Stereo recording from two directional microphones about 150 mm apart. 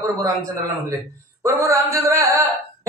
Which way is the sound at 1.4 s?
20° right (ahead or behind).